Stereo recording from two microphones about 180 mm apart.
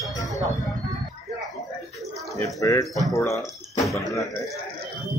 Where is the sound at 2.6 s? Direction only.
15° left (ahead or behind).